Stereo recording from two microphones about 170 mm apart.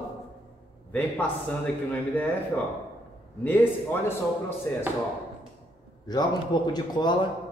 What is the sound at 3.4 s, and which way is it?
Speech, 10° left (ahead or behind).